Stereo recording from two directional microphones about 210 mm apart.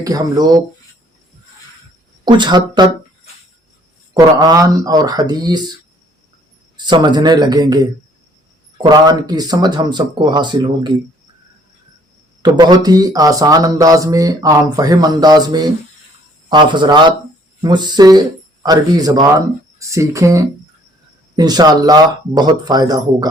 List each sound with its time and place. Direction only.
0.0 s speech: 15° right (ahead or behind)
2.2 s speech: 20° right (ahead or behind)
4.1 s speech: 20° right (ahead or behind)
6.8 s speech: 20° right (ahead or behind)
12.4 s speech: 20° right (ahead or behind)